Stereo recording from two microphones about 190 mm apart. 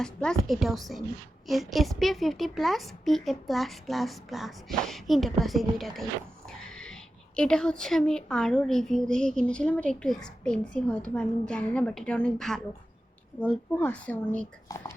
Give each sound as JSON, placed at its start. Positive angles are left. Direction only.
{"t": 0.0, "sound": "a woman's voice", "side_deg": 5}